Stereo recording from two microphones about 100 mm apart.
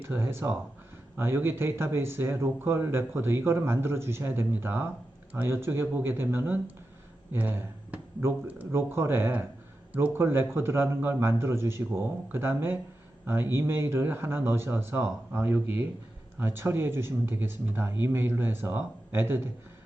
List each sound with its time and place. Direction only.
0.0 s speech: 25° right (ahead or behind)